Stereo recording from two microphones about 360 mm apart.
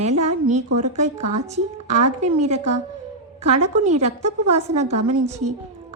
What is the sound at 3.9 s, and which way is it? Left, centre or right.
A woman's voice, centre.